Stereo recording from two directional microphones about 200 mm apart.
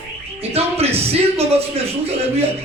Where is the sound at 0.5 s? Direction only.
30° right (ahead or behind).